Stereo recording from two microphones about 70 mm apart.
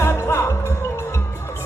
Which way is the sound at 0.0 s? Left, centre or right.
Left.